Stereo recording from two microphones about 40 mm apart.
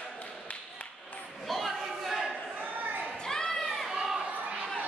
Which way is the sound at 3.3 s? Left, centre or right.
Centre.